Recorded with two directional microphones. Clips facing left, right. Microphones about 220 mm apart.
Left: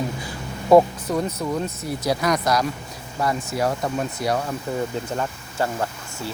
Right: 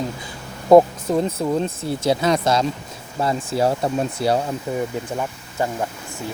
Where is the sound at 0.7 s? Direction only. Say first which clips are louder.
Right 3 dB; 25° right (ahead or behind).